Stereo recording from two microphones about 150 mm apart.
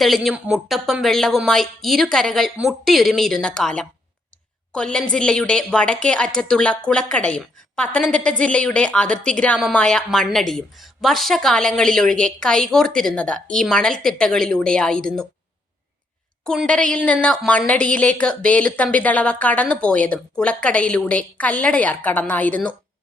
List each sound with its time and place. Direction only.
0.0 s speech: centre (ahead or behind)
16.4 s a woman's voice: 5° left (ahead or behind)